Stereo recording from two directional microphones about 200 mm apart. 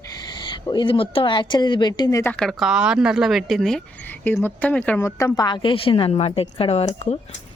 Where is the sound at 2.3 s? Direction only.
Centre (ahead or behind).